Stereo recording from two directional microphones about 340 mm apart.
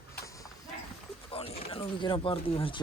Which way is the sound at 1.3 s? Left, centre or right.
Centre.